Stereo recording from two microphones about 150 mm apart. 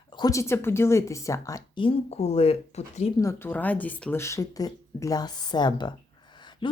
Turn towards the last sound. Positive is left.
turn(degrees=30)  # may be behind; listen again after turning